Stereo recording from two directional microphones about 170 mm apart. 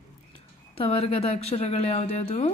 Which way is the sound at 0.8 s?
35° left (ahead or behind).